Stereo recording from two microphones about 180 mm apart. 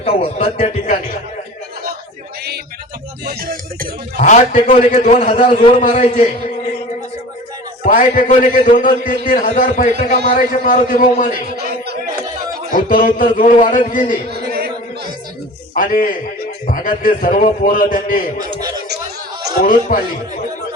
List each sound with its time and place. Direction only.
0.0 s a man's voice: 30° left (ahead or behind)
3.2 s a sound: 55° right (ahead or behind)
4.2 s a man's voice: 45° left (ahead or behind)
7.9 s a man's voice: 50° left (ahead or behind)
12.7 s a man's voice: 50° left (ahead or behind)
14.3 s a sound: 55° right (ahead or behind)
15.7 s a man's voice: 50° left (ahead or behind)
19.9 s a man's voice: 50° left (ahead or behind)